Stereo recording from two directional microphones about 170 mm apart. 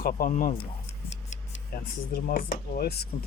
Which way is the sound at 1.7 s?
65° left (ahead or behind).